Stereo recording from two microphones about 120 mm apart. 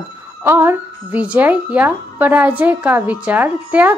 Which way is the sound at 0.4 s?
20° right (ahead or behind).